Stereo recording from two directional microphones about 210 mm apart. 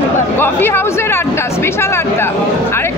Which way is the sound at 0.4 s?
10° left (ahead or behind).